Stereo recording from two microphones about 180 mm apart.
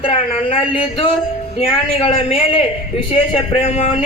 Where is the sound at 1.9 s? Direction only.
30° left (ahead or behind).